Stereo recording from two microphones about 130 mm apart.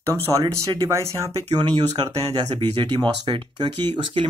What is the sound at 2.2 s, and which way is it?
Speech, 45° right (ahead or behind).